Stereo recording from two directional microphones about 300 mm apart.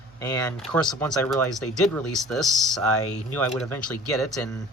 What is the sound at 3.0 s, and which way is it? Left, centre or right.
Speech, left.